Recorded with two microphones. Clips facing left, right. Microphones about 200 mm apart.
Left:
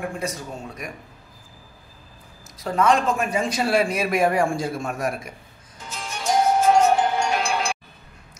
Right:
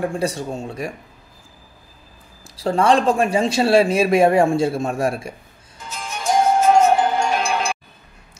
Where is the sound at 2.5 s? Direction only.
30° right (ahead or behind).